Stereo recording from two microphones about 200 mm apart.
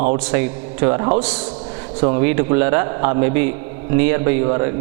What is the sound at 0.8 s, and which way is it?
Speech, 25° right (ahead or behind).